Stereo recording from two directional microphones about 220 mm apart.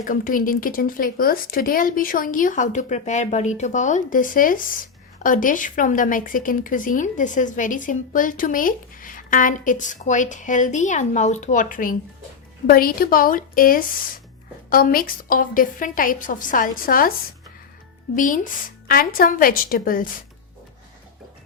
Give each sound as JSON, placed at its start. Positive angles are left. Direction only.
{"t": 0.0, "sound": "speech", "side_deg": 40}
{"t": 18.2, "sound": "speech", "side_deg": 35}